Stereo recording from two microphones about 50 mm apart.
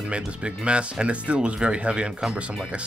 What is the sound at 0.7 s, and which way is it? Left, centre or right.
Speech, right.